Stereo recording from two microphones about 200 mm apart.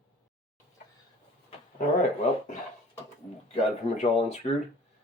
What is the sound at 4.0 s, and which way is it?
Speech, 35° left (ahead or behind).